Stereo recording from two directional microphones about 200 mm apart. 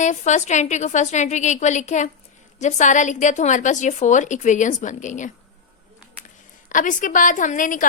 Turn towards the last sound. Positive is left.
turn(degrees=40)  # may be behind; listen again after turning